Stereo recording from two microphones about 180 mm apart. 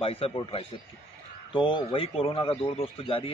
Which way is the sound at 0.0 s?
30° left (ahead or behind).